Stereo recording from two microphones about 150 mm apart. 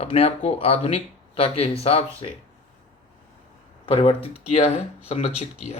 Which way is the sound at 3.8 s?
40° left (ahead or behind).